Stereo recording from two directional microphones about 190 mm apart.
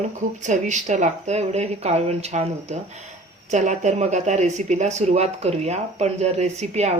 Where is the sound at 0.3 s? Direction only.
40° right (ahead or behind).